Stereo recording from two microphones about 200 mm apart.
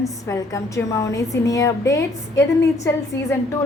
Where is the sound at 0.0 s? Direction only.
15° left (ahead or behind).